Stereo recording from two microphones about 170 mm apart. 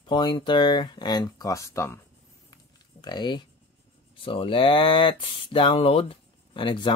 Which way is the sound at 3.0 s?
25° left (ahead or behind).